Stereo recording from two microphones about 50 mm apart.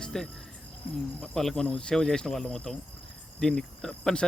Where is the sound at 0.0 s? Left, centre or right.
Centre.